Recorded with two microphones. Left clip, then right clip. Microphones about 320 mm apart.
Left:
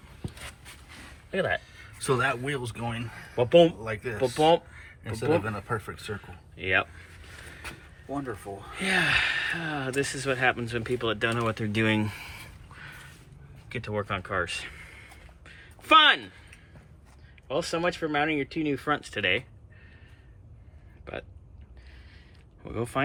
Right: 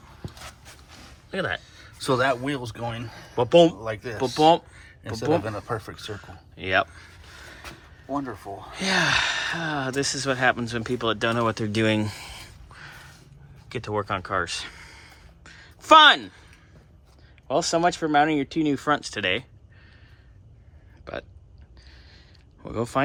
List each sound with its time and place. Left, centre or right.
1.3 s speech: centre
1.6 s speech: centre
3.3 s speech: centre
3.8 s speech: right
4.4 s speech: centre
5.4 s speech: right
6.1 s speech: centre
8.7 s speech: centre
17.5 s speech: centre
21.0 s speech: centre
22.6 s speech: centre